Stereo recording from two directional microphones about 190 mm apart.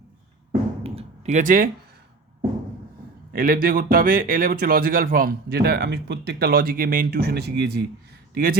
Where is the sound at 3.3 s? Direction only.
50° right (ahead or behind).